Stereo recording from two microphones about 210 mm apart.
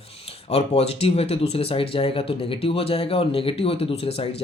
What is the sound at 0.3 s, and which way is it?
Speech, 30° left (ahead or behind).